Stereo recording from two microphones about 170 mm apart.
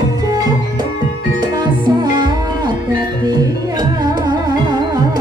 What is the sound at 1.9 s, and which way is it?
Music, 25° right (ahead or behind).